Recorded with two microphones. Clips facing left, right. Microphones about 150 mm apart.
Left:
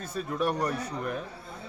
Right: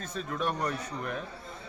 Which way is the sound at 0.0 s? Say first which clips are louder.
Left 3 dB; 10° left (ahead or behind).